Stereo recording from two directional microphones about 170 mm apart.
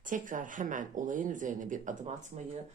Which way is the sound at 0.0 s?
50° right (ahead or behind).